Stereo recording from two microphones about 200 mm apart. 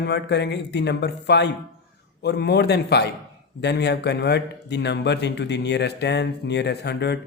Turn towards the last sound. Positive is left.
turn(degrees=55)  # may be behind; listen again after turning